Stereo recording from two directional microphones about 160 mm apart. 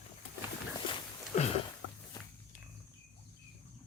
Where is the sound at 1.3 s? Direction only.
45° left (ahead or behind).